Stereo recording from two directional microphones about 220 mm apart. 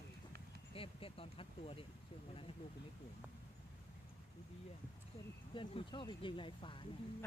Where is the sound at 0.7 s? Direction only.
25° left (ahead or behind).